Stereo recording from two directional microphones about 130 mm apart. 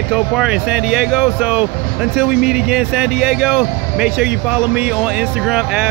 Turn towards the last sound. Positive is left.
turn(degrees=-5)  # may be behind; listen again after turning